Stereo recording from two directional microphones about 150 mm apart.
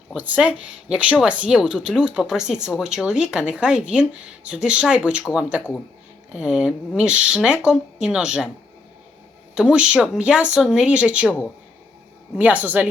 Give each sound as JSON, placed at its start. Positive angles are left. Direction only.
{"t": 0.1, "sound": "speech", "side_deg": -10}
{"t": 9.6, "sound": "speech", "side_deg": -5}
{"t": 12.4, "sound": "speech", "side_deg": -10}